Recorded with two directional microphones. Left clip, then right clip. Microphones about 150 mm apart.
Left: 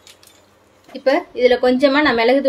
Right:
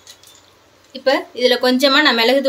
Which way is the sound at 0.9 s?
45° left (ahead or behind).